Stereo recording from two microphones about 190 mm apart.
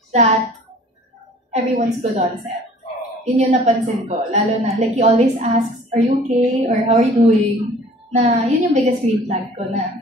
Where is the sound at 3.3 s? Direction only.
35° right (ahead or behind).